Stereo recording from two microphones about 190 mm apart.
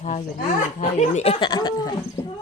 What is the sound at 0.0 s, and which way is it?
Speech, 40° left (ahead or behind).